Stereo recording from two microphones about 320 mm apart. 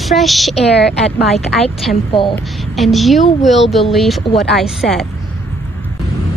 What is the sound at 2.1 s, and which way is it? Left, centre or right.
Speech, centre.